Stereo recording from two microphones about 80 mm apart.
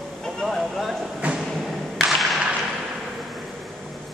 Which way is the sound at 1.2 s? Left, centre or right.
Centre.